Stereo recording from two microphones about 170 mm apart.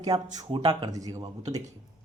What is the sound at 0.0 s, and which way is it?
Speech, 25° right (ahead or behind).